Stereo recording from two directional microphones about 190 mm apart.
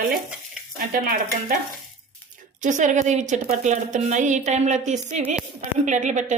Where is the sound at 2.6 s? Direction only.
40° right (ahead or behind).